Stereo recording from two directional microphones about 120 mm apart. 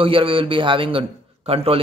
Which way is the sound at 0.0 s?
50° right (ahead or behind).